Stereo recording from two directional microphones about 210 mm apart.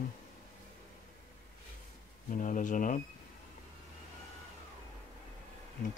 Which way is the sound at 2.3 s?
40° left (ahead or behind).